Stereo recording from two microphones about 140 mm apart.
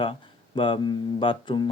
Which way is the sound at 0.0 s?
35° left (ahead or behind).